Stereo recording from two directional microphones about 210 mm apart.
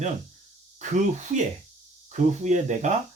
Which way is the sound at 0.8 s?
35° right (ahead or behind).